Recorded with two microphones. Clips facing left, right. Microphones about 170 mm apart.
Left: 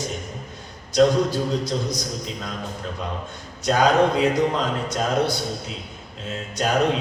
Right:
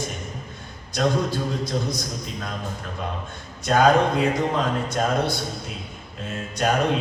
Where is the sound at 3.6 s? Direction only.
55° right (ahead or behind).